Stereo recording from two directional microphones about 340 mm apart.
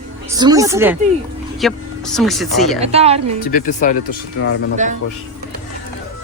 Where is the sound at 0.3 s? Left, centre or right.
Centre.